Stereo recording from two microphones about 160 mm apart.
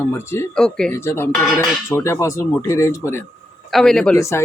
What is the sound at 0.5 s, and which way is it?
Speech, 5° left (ahead or behind).